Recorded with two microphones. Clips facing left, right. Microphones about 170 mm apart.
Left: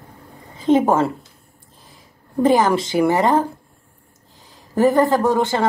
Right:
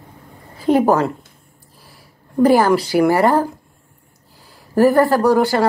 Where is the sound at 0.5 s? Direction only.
20° left (ahead or behind).